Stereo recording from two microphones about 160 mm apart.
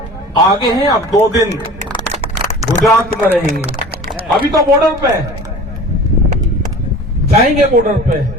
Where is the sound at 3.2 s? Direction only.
10° left (ahead or behind).